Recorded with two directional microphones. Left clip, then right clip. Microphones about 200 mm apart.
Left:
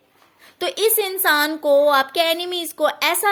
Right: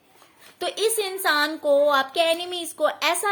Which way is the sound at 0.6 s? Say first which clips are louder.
Left 4 dB; 45° left (ahead or behind).